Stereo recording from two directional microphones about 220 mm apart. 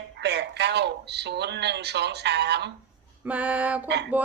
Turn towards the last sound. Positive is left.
turn(degrees=-5)  # may be behind; listen again after turning